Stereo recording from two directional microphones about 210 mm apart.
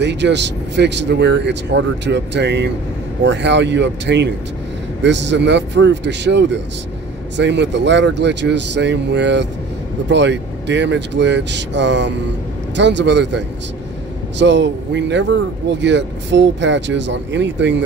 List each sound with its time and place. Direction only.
0.0 s speech: 55° right (ahead or behind)
14.4 s speech: 55° right (ahead or behind)